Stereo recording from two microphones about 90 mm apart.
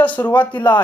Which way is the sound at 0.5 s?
60° left (ahead or behind).